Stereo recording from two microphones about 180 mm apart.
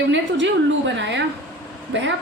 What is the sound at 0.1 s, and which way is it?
A woman's voice, 90° right.